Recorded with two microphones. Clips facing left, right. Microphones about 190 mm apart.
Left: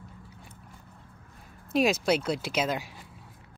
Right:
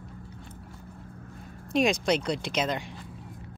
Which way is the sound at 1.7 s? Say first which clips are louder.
Even; 5° left (ahead or behind).